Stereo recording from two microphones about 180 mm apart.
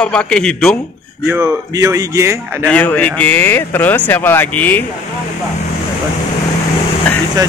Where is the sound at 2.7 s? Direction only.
10° left (ahead or behind).